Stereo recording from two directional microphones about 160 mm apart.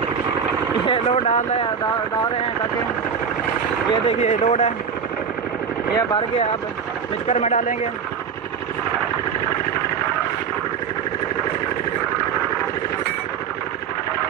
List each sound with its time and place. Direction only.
0.8 s a sound: 35° left (ahead or behind)
1.3 s speech: 45° left (ahead or behind)
3.9 s speech: 40° left (ahead or behind)
5.9 s speech: 35° left (ahead or behind)
7.2 s speech: 45° left (ahead or behind)